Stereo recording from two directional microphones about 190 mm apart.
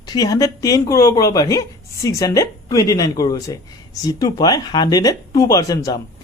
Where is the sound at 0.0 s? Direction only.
20° left (ahead or behind).